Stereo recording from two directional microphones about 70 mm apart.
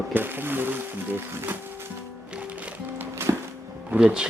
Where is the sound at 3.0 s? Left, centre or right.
Right.